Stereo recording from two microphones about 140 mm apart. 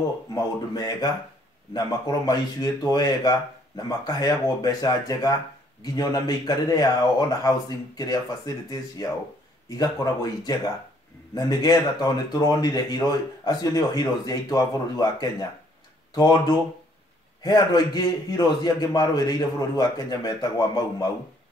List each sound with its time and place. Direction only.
0.3 s speech: 30° left (ahead or behind)